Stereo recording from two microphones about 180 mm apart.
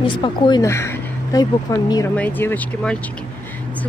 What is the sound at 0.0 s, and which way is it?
Speech, 25° left (ahead or behind).